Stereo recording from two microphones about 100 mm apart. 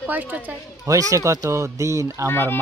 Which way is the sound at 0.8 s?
35° right (ahead or behind).